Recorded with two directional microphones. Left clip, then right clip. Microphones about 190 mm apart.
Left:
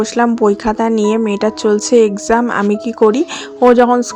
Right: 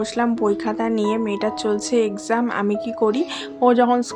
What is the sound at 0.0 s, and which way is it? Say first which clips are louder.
A woman's voice: left 8 dB; 35° left (ahead or behind).